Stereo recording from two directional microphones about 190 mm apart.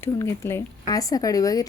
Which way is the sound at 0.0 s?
15° left (ahead or behind).